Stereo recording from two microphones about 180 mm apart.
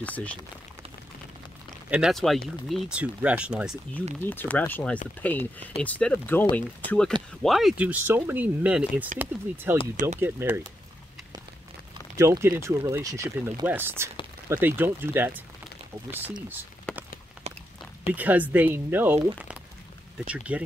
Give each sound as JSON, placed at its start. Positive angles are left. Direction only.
{"t": 0.0, "sound": "speech", "side_deg": 10}
{"t": 1.9, "sound": "speech", "side_deg": -5}
{"t": 4.2, "sound": "speech", "side_deg": 10}
{"t": 9.9, "sound": "speech", "side_deg": -40}
{"t": 10.2, "sound": "speech", "side_deg": -15}
{"t": 12.2, "sound": "speech", "side_deg": -15}
{"t": 16.9, "sound": "a sound", "side_deg": 5}
{"t": 18.1, "sound": "speech", "side_deg": -10}